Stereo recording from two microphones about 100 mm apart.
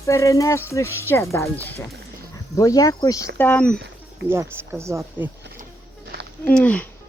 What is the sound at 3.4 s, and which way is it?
Speech, 15° left (ahead or behind).